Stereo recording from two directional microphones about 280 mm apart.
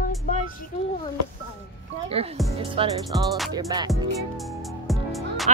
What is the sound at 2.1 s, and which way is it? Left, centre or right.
Speech, right.